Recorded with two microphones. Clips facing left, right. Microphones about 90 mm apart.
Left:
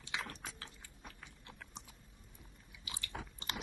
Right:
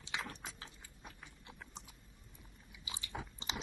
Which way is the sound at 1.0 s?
15° right (ahead or behind).